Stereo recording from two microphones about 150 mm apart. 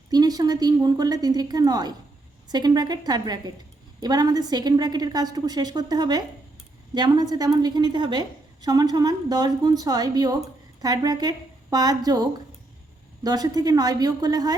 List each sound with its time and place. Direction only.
0.1 s a woman's voice: 25° right (ahead or behind)